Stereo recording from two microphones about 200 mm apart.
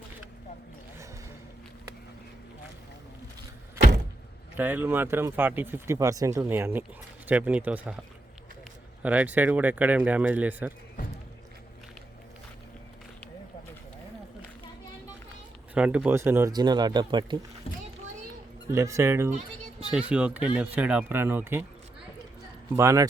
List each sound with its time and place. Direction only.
4.5 s speech: 10° right (ahead or behind)
9.0 s speech: 5° right (ahead or behind)
15.7 s speech: 5° right (ahead or behind); by 17.4 s 25° right (ahead or behind)
17.7 s a sound: 30° left (ahead or behind)
18.7 s speech: 15° right (ahead or behind)
22.7 s speech: 15° right (ahead or behind)